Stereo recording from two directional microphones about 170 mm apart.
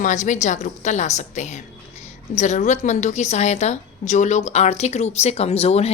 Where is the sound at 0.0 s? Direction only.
45° left (ahead or behind).